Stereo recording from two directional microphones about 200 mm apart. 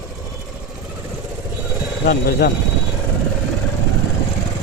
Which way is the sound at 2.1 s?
55° left (ahead or behind).